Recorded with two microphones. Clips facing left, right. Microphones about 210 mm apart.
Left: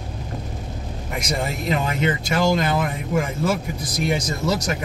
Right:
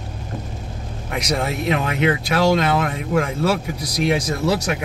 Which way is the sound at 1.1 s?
65° right (ahead or behind).